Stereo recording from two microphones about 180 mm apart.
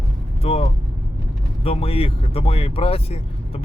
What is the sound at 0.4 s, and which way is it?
Speech, 35° left (ahead or behind).